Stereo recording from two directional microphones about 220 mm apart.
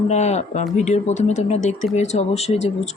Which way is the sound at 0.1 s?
30° left (ahead or behind).